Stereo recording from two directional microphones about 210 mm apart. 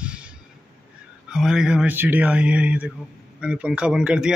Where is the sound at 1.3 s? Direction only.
Centre (ahead or behind).